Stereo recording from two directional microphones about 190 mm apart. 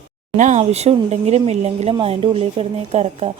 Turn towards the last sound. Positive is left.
turn(degrees=-35)  # may be behind; listen again after turning